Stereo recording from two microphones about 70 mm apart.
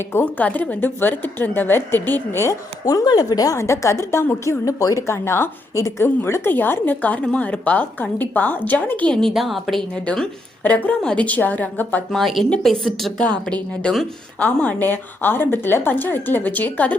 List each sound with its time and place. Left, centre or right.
0.1 s a woman's voice: left
0.4 s speech: left
2.8 s speech: left
3.6 s a woman's voice: left
4.6 s speech: left
9.3 s a woman's voice: centre
10.6 s speech: left
12.1 s a woman's voice: centre
13.3 s a woman's voice: centre